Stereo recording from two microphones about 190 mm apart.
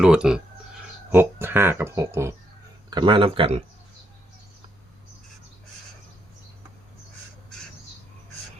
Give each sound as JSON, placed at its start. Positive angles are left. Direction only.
{"t": 0.0, "sound": "speech", "side_deg": -5}
{"t": 2.9, "sound": "a man's voice", "side_deg": -25}